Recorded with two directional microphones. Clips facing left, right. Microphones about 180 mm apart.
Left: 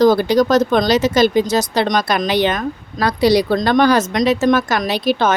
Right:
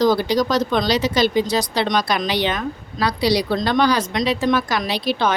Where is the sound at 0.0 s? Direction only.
50° left (ahead or behind).